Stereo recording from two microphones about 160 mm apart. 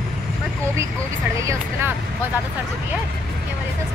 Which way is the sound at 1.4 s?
15° right (ahead or behind).